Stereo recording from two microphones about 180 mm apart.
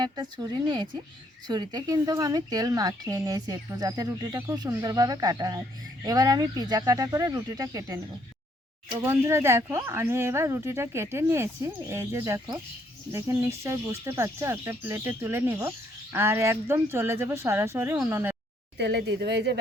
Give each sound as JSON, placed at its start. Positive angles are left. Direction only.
{"t": 0.0, "sound": "speech", "side_deg": -25}
{"t": 9.0, "sound": "speech", "side_deg": -15}
{"t": 18.8, "sound": "speech", "side_deg": -70}